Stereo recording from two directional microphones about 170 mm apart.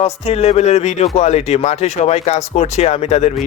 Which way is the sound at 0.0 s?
40° left (ahead or behind).